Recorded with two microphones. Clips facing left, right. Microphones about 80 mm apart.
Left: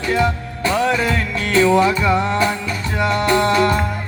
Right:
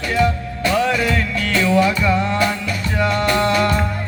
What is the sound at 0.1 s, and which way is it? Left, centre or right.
Music, left.